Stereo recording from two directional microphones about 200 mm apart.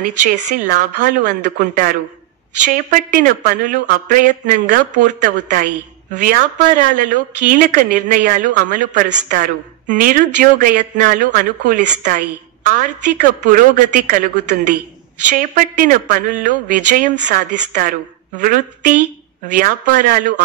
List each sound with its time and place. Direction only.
0.2 s speech: 40° right (ahead or behind)
15.3 s a woman's voice: 40° right (ahead or behind)